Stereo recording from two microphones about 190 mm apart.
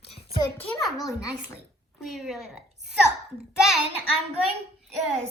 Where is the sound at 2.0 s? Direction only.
Centre (ahead or behind).